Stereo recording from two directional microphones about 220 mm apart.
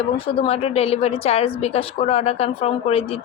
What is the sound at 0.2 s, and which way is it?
A woman's voice, 25° left (ahead or behind).